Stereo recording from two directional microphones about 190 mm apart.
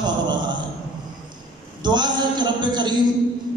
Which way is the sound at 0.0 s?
25° right (ahead or behind).